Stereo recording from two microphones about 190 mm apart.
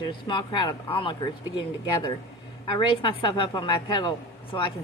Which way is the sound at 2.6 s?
25° left (ahead or behind).